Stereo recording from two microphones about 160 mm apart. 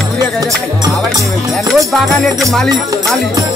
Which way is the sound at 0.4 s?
20° right (ahead or behind).